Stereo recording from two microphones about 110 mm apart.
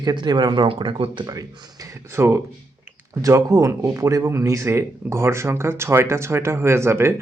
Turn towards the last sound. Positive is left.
turn(degrees=-25)  # may be behind; listen again after turning